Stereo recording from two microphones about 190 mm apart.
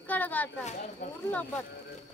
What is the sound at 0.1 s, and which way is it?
Speech, 10° left (ahead or behind).